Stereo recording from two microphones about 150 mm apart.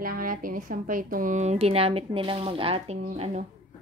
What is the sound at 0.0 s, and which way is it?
A woman's voice, 70° right (ahead or behind).